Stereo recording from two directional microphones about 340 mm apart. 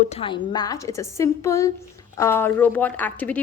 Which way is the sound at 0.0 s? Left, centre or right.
Centre.